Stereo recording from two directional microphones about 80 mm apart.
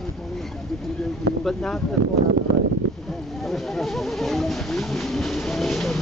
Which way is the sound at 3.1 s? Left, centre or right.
Centre.